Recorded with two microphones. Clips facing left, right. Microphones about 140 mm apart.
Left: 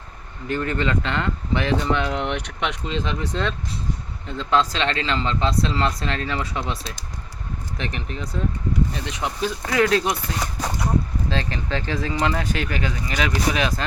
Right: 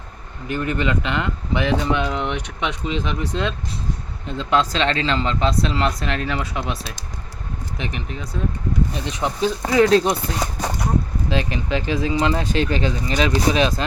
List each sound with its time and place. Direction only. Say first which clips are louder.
0.4 s speech: right 1 dB; 10° right (ahead or behind)
8.9 s speech: right 3 dB; 20° right (ahead or behind)
11.3 s speech: right 6 dB; 15° right (ahead or behind)